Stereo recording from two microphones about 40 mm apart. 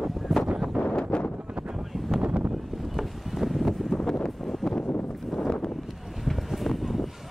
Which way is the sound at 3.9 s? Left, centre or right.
Centre.